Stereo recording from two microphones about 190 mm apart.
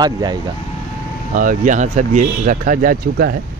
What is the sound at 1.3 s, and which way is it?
Speech, 45° right (ahead or behind).